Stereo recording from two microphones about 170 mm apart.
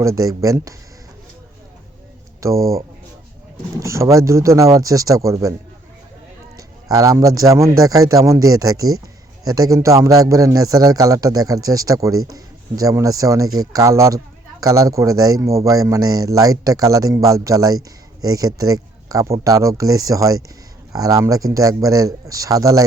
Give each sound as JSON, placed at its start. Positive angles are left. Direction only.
{"t": 0.0, "sound": "a man's voice", "side_deg": -20}
{"t": 2.4, "sound": "speech", "side_deg": -20}
{"t": 3.8, "sound": "a man's voice", "side_deg": -20}
{"t": 6.6, "sound": "a man's voice", "side_deg": -20}